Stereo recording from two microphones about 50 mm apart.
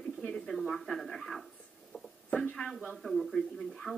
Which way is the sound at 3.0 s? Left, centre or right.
Centre.